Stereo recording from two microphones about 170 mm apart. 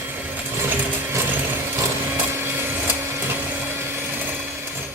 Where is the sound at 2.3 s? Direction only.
15° right (ahead or behind).